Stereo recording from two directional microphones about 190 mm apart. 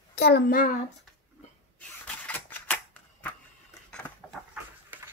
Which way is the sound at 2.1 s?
10° left (ahead or behind).